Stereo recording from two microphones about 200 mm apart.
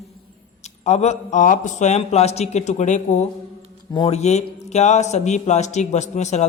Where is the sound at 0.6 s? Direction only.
35° left (ahead or behind).